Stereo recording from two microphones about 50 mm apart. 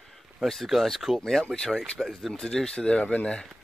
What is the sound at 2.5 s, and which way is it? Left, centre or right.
Speech, centre.